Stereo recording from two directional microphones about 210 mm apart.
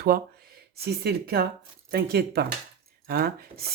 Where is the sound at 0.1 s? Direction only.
45° right (ahead or behind).